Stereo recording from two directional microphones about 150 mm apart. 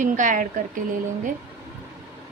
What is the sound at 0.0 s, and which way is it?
Speech, 60° right (ahead or behind).